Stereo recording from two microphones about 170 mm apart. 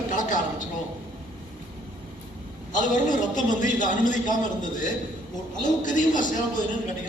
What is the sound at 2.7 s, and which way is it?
A man's voice, 50° left (ahead or behind).